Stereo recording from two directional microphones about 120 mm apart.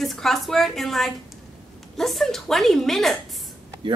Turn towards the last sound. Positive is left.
turn(degrees=0)  # may be behind; listen again after turning